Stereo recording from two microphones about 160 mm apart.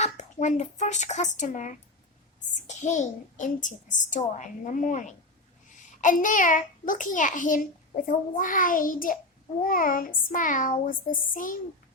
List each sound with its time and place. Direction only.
0.0 s a child's voice: 45° left (ahead or behind)